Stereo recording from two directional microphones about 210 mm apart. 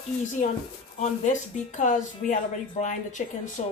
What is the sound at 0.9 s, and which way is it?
Speech, 35° left (ahead or behind).